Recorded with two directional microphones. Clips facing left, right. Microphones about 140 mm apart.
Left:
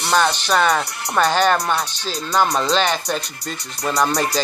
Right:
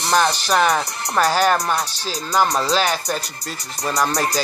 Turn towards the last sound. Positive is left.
turn(degrees=0)  # may be behind; listen again after turning